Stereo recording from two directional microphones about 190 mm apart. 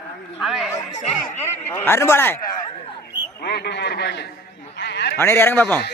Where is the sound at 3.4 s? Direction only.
60° left (ahead or behind).